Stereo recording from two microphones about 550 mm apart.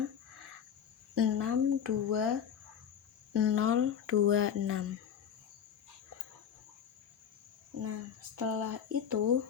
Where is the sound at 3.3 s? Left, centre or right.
Right.